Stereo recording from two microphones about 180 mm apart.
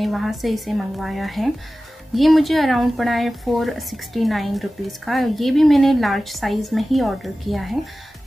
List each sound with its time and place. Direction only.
0.0 s speech: centre (ahead or behind)